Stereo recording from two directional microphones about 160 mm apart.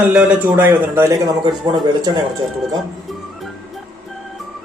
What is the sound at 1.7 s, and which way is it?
Speech, 25° right (ahead or behind).